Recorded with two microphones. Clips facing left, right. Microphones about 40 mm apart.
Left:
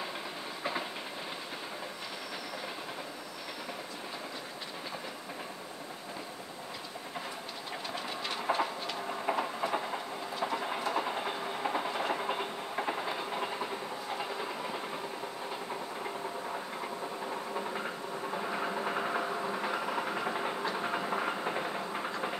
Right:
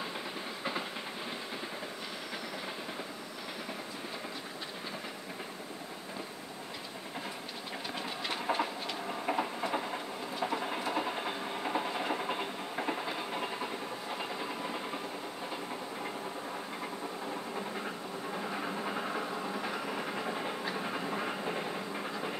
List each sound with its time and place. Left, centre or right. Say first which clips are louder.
7.9 s train: even; centre
18.5 s train: left 4 dB; centre